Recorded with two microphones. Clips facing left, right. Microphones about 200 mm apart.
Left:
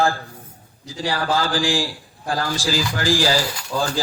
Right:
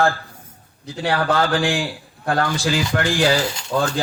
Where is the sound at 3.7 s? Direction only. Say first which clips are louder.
Right 3 dB; 60° right (ahead or behind).